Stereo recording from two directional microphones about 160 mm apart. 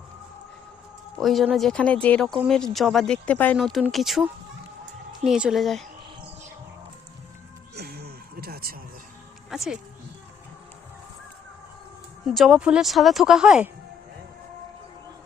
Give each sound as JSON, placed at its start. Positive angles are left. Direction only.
{"t": 1.2, "sound": "speech", "side_deg": 0}
{"t": 7.8, "sound": "a sound", "side_deg": -80}
{"t": 9.5, "sound": "speech", "side_deg": -5}
{"t": 12.2, "sound": "speech", "side_deg": 0}